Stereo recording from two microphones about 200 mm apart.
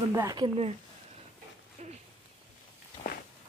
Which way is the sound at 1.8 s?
35° right (ahead or behind).